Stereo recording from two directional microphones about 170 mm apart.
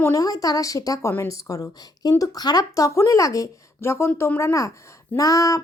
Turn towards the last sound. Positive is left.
turn(degrees=20)  # may be behind; listen again after turning